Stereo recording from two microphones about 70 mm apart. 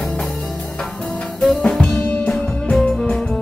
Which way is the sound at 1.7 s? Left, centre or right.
Centre.